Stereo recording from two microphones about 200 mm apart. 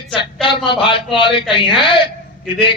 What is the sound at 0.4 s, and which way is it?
A man's voice, 25° left (ahead or behind).